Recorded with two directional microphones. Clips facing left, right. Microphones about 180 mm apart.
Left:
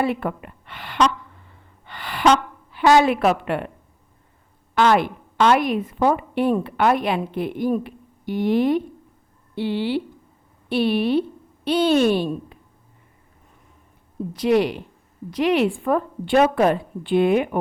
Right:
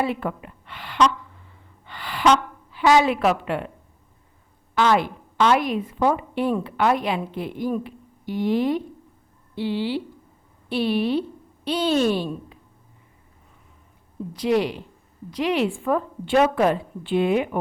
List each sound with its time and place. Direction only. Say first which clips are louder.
0.0 s a woman's voice: left 2 dB; 60° left (ahead or behind)
2.7 s a woman's voice: left 2 dB; 50° left (ahead or behind)
4.7 s a woman's voice: left 2 dB; 60° left (ahead or behind)
14.4 s a woman's voice: left 3 dB; 60° left (ahead or behind)